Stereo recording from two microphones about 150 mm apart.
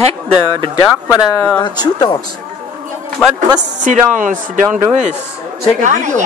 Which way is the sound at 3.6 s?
55° right (ahead or behind).